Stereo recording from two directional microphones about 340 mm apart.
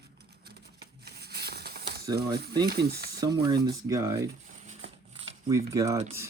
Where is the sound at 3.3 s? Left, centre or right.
Centre.